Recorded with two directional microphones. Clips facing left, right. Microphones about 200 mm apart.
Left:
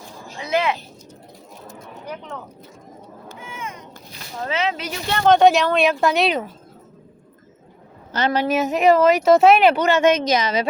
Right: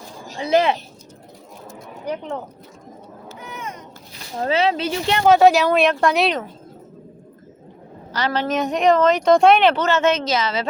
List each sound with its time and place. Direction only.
0.3 s speech: 35° right (ahead or behind)
2.0 s speech: 30° right (ahead or behind)
3.4 s a sound: 40° right (ahead or behind)
4.4 s speech: 35° right (ahead or behind)
5.1 s speech: 5° right (ahead or behind)
8.3 s speech: 10° left (ahead or behind)